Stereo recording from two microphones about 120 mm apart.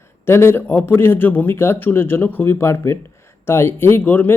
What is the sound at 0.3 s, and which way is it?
Speech, 20° left (ahead or behind).